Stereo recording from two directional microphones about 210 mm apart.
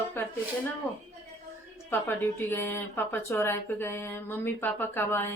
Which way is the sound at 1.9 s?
10° left (ahead or behind).